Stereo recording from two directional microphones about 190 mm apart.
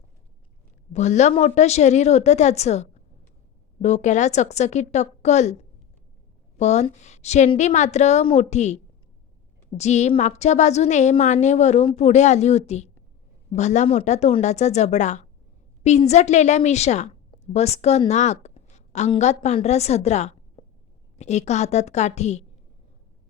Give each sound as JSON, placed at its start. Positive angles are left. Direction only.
{"t": 0.9, "sound": "a woman's voice", "side_deg": 35}